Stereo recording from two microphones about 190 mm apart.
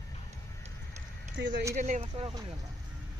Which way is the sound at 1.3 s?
65° right (ahead or behind).